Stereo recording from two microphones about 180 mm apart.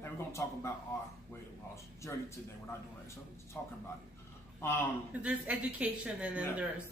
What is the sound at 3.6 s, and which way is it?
Speech, 10° left (ahead or behind).